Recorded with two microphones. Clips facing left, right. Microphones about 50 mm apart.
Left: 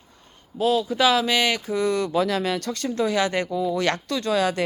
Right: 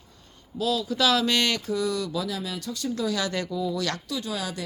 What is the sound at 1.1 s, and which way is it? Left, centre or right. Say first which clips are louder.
Speech: left 3 dB; centre.